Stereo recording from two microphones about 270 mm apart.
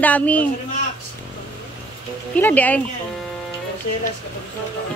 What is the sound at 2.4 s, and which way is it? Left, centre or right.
Speech, centre.